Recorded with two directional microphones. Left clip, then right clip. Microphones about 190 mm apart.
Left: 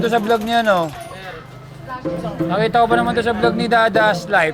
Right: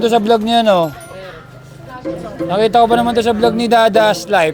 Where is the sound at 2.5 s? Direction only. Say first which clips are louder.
Right 4 dB; 55° right (ahead or behind).